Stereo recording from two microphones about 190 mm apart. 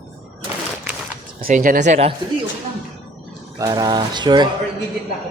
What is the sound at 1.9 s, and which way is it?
Speech, 30° right (ahead or behind).